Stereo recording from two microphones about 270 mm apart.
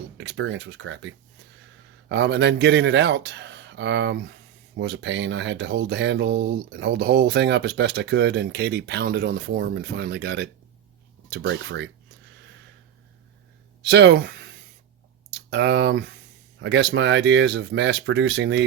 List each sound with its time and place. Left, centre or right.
0.2 s speech: right
13.8 s speech: right